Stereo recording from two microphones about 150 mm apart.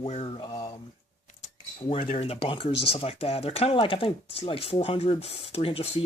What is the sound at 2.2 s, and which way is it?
Speech, 40° left (ahead or behind).